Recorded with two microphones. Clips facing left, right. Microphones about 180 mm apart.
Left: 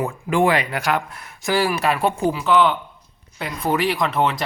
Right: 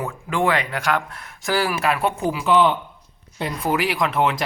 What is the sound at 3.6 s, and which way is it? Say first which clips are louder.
Speech: left 2 dB; 5° right (ahead or behind).